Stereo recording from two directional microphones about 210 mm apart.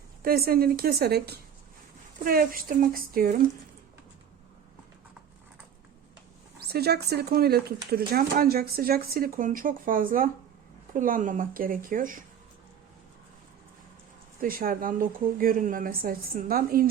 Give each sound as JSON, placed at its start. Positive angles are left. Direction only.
{"t": 0.2, "sound": "speech", "side_deg": -45}
{"t": 6.6, "sound": "speech", "side_deg": -50}
{"t": 14.4, "sound": "speech", "side_deg": -45}